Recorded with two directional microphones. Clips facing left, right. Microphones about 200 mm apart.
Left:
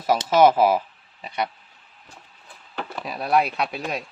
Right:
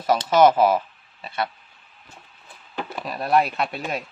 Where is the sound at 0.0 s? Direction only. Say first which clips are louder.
Even; 10° left (ahead or behind).